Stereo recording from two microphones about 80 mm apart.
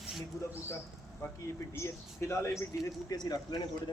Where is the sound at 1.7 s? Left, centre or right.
Left.